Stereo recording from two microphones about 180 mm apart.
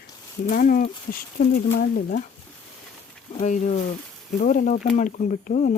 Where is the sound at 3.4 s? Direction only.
45° left (ahead or behind).